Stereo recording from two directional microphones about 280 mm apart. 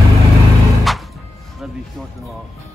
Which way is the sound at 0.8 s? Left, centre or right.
Centre.